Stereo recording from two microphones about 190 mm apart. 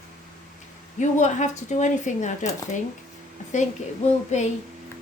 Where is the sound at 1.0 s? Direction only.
40° left (ahead or behind).